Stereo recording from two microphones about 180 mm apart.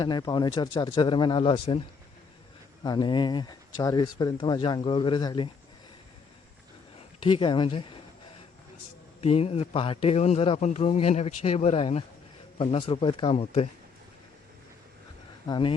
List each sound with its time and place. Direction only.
0.0 s speech: 25° left (ahead or behind)
2.8 s speech: 25° left (ahead or behind)
7.2 s speech: 30° left (ahead or behind)
9.2 s a man's voice: 35° left (ahead or behind)
15.4 s speech: 25° left (ahead or behind)